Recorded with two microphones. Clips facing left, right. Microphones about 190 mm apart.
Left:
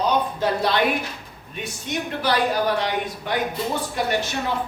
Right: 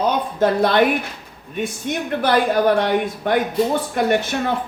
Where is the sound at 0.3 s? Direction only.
50° right (ahead or behind).